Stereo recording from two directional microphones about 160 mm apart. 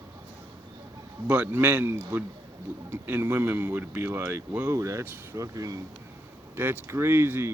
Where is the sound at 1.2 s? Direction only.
10° right (ahead or behind).